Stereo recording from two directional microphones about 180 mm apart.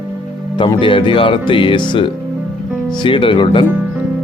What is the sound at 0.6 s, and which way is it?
Speech, 30° left (ahead or behind).